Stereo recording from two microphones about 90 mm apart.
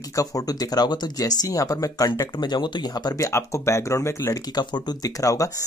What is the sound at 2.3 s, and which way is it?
Speech, 55° left (ahead or behind).